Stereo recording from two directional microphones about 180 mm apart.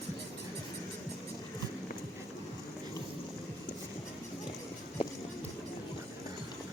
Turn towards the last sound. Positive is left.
turn(degrees=30)  # may be behind; listen again after turning